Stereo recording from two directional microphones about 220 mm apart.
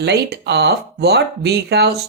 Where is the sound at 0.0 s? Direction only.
50° right (ahead or behind).